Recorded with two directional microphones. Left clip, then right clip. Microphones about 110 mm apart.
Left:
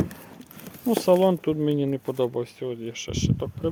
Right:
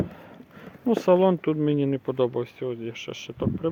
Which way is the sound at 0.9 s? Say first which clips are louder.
Even; 30° left (ahead or behind).